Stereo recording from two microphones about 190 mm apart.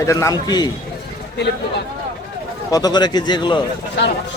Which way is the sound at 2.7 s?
20° left (ahead or behind).